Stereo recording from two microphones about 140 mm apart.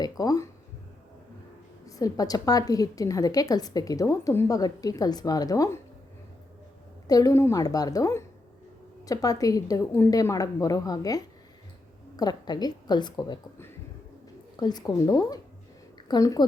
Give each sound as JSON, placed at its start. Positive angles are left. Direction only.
{"t": 0.2, "sound": "a woman's voice", "side_deg": 25}
{"t": 1.9, "sound": "a woman's voice", "side_deg": 25}
{"t": 7.1, "sound": "a woman's voice", "side_deg": 25}
{"t": 14.5, "sound": "a woman's voice", "side_deg": 30}